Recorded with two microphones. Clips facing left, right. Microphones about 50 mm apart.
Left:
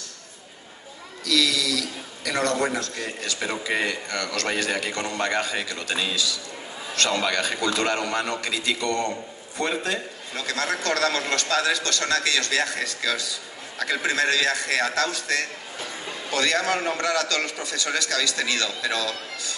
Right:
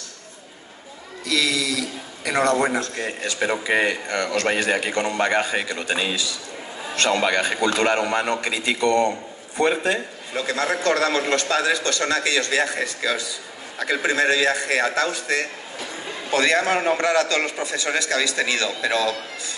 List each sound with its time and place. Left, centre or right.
1.2 s a man's voice: right